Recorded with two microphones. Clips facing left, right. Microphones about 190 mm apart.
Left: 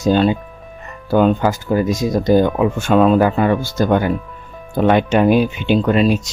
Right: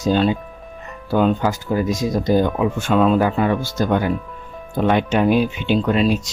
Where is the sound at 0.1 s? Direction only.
50° left (ahead or behind).